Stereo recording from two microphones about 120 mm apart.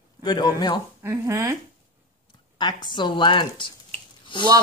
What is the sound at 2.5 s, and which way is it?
Speech, 40° left (ahead or behind).